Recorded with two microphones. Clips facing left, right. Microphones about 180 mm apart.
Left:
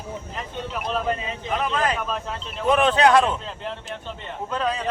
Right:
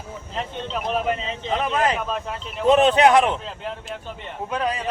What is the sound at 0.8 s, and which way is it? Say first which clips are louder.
Speech: right 2 dB; 20° right (ahead or behind).